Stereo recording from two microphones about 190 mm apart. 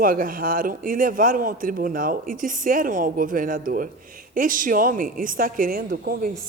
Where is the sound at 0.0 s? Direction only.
50° right (ahead or behind).